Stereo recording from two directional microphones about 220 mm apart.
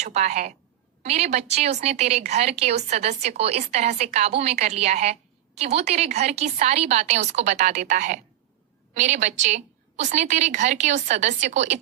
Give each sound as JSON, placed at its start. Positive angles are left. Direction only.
{"t": 0.0, "sound": "a woman's voice", "side_deg": -30}